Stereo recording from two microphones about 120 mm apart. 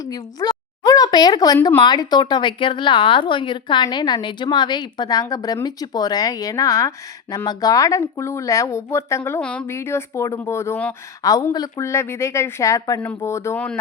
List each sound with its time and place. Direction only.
0.0 s a sound: 30° left (ahead or behind)
1.8 s a woman's voice: 35° left (ahead or behind)
9.4 s a woman's voice: 10° left (ahead or behind)
9.6 s a woman's voice: 20° left (ahead or behind)